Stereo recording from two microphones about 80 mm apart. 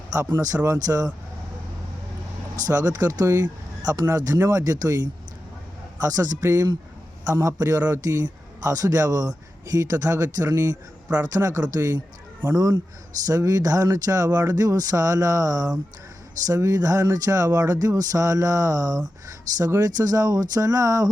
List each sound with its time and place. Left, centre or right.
0.4 s speech: right
2.6 s speech: right
6.0 s speech: right